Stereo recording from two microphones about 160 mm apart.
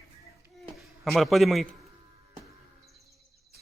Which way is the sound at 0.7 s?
Centre (ahead or behind).